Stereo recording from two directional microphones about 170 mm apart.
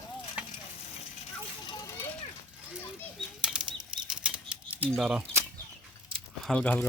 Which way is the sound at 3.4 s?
5° right (ahead or behind).